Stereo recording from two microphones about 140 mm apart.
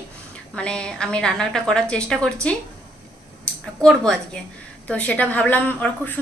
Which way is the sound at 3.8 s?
5° left (ahead or behind).